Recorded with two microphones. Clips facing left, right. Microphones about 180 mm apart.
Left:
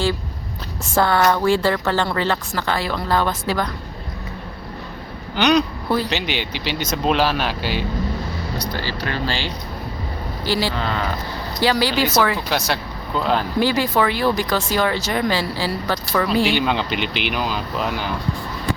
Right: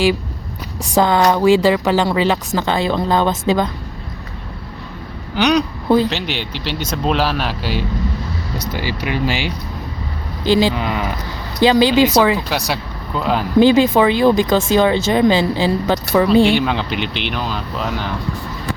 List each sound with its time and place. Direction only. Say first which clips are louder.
0.9 s speech: right 3 dB; 15° right (ahead or behind)
5.3 s speech: right 1 dB; centre (ahead or behind)
8.7 s speech: right 7 dB; 15° right (ahead or behind)
12.5 s speech: right 1 dB; centre (ahead or behind)
13.6 s speech: right 10 dB; 20° right (ahead or behind)
16.4 s speech: right 5 dB; centre (ahead or behind)